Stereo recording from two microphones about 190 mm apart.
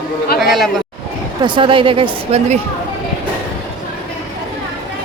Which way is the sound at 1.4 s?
25° right (ahead or behind).